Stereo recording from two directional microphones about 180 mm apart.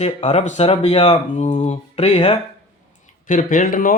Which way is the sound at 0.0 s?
35° left (ahead or behind).